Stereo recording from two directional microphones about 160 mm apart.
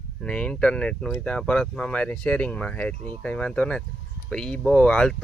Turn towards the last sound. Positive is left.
turn(degrees=5)  # may be behind; listen again after turning